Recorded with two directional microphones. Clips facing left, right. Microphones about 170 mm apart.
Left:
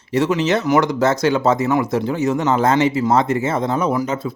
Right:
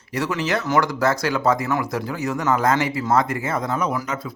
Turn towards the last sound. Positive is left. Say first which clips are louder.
# left 5 dB
turn(degrees=25)  # may be behind; listen again after turning